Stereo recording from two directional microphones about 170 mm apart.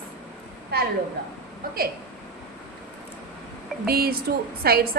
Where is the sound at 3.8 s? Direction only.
65° right (ahead or behind).